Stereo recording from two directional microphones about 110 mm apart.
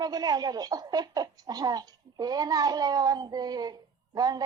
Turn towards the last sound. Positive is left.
turn(degrees=-35)  # may be behind; listen again after turning